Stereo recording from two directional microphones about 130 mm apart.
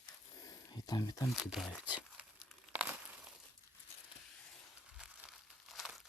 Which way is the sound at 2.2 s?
10° right (ahead or behind).